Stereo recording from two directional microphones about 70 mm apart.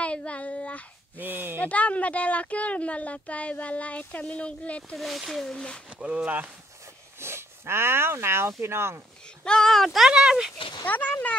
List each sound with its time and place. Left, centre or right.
0.0 s child singing: centre
1.1 s speech: right
1.6 s speech: left
4.9 s speech: centre
5.9 s speech: centre
7.2 s speech: right
9.4 s speech: centre
10.9 s speech: left